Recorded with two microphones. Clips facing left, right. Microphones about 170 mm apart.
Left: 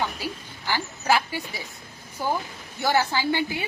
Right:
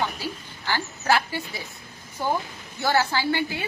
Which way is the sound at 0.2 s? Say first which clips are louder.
Even; 15° left (ahead or behind).